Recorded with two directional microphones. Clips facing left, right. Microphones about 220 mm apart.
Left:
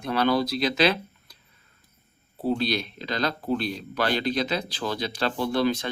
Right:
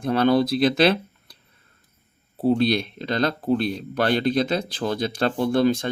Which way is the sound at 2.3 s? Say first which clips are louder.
Right 6 dB; 55° right (ahead or behind).